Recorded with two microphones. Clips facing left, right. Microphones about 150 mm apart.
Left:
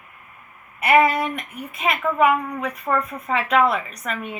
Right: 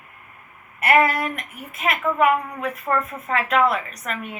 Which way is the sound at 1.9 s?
5° right (ahead or behind).